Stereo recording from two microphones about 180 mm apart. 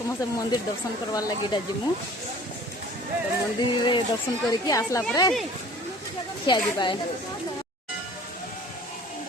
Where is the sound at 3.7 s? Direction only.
25° left (ahead or behind).